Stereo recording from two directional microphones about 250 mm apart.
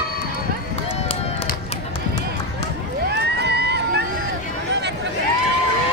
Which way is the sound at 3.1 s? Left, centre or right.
Right.